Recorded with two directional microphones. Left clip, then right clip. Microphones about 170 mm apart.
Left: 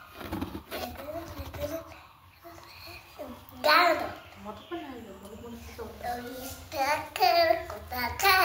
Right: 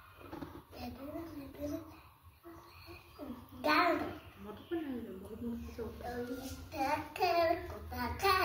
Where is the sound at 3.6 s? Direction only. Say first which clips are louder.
Left 8 dB; 20° right (ahead or behind).